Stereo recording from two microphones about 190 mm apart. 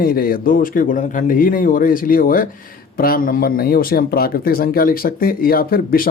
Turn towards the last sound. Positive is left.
turn(degrees=50)  # may be behind; listen again after turning